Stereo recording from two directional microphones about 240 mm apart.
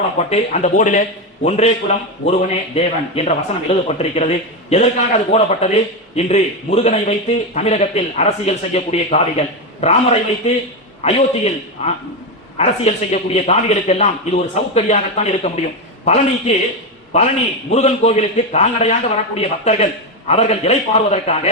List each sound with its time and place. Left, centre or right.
0.2 s speech: left
17.7 s speech: left